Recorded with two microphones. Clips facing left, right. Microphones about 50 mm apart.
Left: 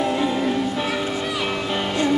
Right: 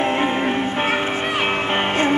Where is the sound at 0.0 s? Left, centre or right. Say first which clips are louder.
Right 2 dB; right.